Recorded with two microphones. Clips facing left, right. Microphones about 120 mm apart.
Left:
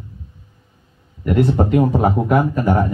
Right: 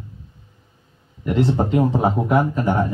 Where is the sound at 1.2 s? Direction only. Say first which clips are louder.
Left 3 dB; 25° right (ahead or behind).